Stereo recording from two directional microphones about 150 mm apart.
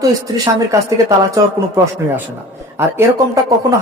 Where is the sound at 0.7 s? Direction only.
20° right (ahead or behind).